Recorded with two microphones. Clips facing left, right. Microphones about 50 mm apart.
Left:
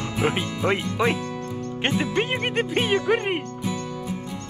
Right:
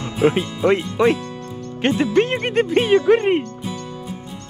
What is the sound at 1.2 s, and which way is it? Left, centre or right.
Music, left.